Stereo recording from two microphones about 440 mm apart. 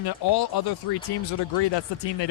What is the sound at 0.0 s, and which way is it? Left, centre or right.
Speech, left.